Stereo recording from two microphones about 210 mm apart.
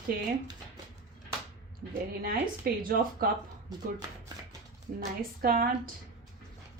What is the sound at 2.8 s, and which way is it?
Speech, 45° right (ahead or behind).